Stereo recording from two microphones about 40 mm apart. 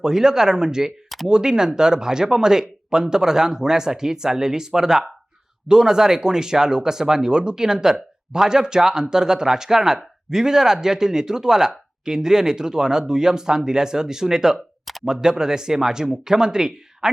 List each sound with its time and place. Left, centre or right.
0.0 s speech: centre